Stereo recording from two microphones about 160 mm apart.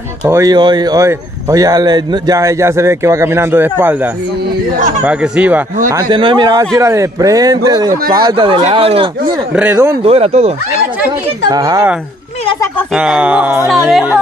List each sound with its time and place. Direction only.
0.4 s a man's voice: 25° right (ahead or behind); by 5.6 s 5° right (ahead or behind)
5.9 s a man's voice: 25° right (ahead or behind)
8.5 s speech: 40° right (ahead or behind)
11.4 s a man's voice: 25° right (ahead or behind)
12.9 s speech: 5° right (ahead or behind)